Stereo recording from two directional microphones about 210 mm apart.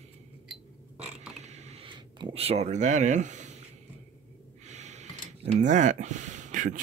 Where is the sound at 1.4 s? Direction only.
30° right (ahead or behind).